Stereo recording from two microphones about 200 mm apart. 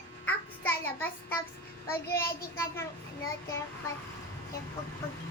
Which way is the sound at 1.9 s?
10° left (ahead or behind).